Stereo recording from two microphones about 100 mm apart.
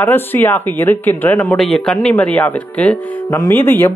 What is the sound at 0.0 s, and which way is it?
Speech, 20° left (ahead or behind).